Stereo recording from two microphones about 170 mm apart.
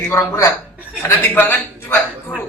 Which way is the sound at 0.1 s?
15° left (ahead or behind).